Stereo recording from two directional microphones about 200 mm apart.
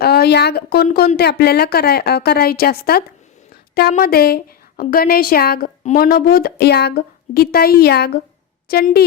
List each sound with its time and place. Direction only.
0.0 s a woman's voice: 55° left (ahead or behind)